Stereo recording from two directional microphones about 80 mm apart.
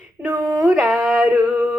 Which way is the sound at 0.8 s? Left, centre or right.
Centre.